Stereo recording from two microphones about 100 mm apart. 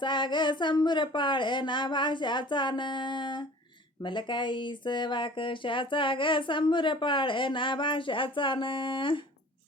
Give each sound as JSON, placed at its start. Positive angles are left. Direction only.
{"t": 0.0, "sound": "speech", "side_deg": 50}